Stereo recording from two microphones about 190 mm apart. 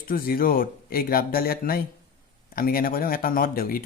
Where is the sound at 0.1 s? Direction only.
50° left (ahead or behind).